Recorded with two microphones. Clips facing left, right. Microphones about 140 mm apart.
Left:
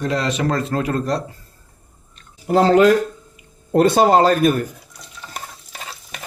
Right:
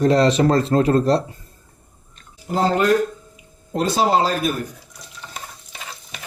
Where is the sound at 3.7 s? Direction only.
55° left (ahead or behind).